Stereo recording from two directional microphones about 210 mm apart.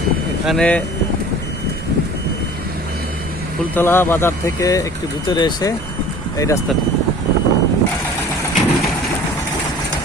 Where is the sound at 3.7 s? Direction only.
10° left (ahead or behind).